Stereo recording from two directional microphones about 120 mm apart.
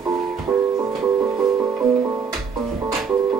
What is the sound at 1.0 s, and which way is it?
Music, 25° right (ahead or behind).